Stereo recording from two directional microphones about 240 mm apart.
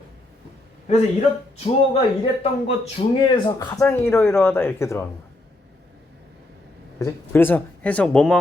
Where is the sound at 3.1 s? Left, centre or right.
Left.